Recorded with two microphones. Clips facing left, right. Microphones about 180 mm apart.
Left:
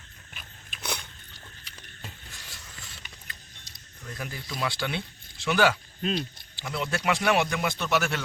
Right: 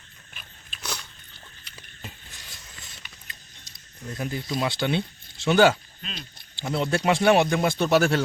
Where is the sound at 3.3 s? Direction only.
25° right (ahead or behind).